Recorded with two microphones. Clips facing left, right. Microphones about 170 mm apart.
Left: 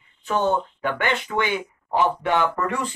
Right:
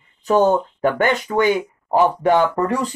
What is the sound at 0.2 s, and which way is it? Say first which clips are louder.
A man's voice: right 7 dB; 40° right (ahead or behind).